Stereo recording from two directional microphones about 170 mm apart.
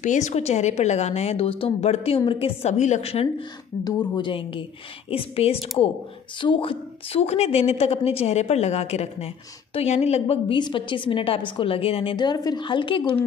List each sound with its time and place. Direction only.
0.0 s a woman's voice: 45° left (ahead or behind); by 13.0 s 30° left (ahead or behind)